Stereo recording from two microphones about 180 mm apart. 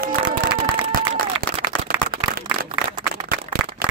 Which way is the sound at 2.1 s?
55° right (ahead or behind).